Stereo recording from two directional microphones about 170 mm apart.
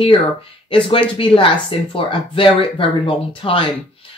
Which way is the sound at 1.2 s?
30° left (ahead or behind).